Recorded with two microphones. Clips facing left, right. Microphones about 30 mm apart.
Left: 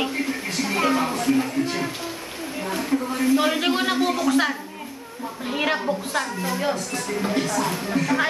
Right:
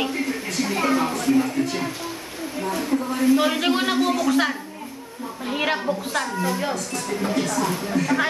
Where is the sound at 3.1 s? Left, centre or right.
Centre.